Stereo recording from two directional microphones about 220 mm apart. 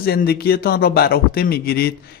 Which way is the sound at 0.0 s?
45° left (ahead or behind).